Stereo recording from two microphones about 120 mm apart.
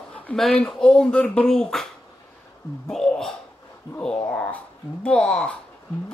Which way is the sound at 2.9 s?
5° left (ahead or behind).